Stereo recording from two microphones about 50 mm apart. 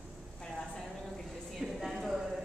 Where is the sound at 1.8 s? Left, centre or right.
Centre.